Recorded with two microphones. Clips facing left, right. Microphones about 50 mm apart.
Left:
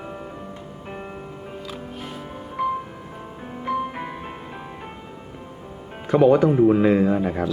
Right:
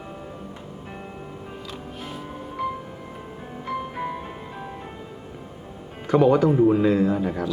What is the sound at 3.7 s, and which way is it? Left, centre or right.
Music, centre.